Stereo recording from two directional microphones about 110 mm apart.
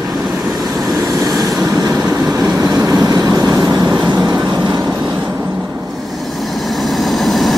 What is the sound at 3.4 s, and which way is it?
Vehicle, 35° right (ahead or behind).